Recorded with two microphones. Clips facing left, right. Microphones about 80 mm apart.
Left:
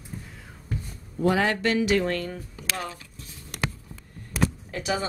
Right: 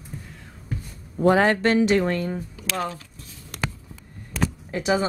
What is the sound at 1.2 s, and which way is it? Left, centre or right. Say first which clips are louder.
Speech: right 5 dB; right.